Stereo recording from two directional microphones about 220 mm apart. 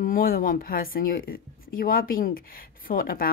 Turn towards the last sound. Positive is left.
turn(degrees=40)  # may be behind; listen again after turning